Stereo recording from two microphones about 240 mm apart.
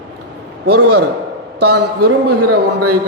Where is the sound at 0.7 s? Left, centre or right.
Right.